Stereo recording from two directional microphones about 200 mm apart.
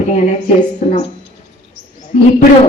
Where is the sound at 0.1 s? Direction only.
35° left (ahead or behind).